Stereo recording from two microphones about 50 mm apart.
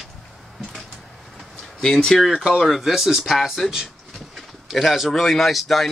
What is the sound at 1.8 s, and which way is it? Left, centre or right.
Speech, centre.